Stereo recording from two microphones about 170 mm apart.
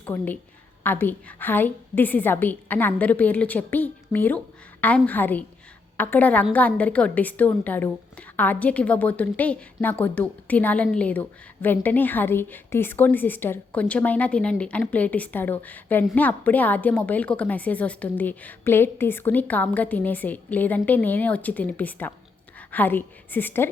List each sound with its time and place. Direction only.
0.0 s a woman's voice: 10° left (ahead or behind)